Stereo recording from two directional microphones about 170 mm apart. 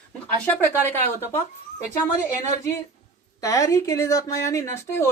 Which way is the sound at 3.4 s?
20° left (ahead or behind).